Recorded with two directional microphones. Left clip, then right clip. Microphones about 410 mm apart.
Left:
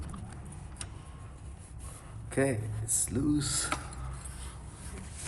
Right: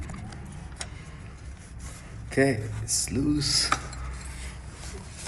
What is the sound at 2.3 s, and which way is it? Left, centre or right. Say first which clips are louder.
A man's voice: right 6 dB; centre.